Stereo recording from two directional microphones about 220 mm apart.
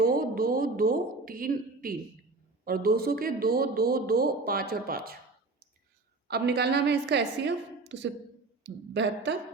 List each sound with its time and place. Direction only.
0.0 s a sound: 40° right (ahead or behind)
2.6 s a man's voice: 45° right (ahead or behind)
6.2 s a man's voice: 45° right (ahead or behind)